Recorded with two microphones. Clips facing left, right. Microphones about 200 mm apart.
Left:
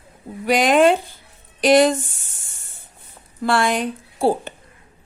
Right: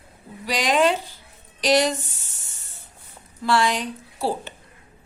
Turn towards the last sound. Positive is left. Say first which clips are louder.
# left 7 dB
turn(degrees=50)  # may be behind; listen again after turning